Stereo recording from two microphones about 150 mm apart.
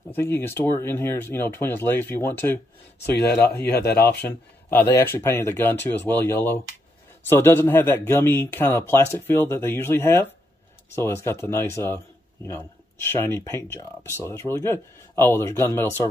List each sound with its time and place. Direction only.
0.1 s speech: 15° left (ahead or behind)
3.8 s speech: 90° left
4.3 s speech: 15° left (ahead or behind)